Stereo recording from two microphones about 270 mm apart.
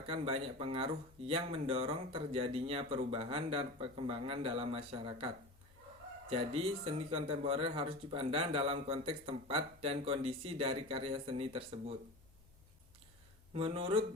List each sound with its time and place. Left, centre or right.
0.1 s speech: centre
6.3 s speech: right
13.5 s speech: centre